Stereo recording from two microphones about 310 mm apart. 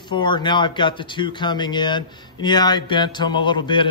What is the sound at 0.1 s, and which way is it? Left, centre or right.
A man's voice, centre.